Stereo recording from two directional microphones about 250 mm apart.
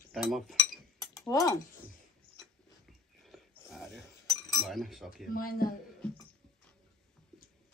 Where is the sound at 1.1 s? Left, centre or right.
Centre.